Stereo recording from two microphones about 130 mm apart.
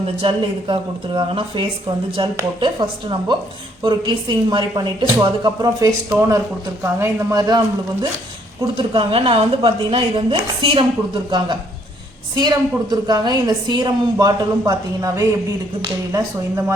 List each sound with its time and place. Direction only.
0.2 s a woman's voice: 40° right (ahead or behind)
8.7 s speech: 40° right (ahead or behind)
9.6 s a woman's voice: 35° right (ahead or behind)